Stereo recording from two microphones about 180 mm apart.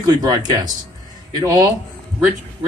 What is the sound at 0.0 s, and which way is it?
Speech, 20° right (ahead or behind).